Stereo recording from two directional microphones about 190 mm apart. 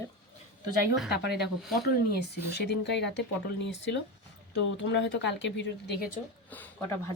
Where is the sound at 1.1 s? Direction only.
60° left (ahead or behind).